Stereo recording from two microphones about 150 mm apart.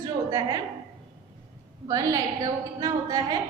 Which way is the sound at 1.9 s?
25° right (ahead or behind).